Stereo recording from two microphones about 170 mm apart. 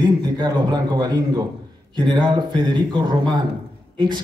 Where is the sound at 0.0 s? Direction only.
25° right (ahead or behind).